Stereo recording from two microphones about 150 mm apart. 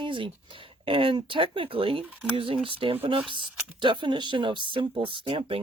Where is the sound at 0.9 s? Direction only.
35° right (ahead or behind).